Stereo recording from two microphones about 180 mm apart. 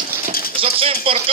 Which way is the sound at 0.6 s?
30° right (ahead or behind).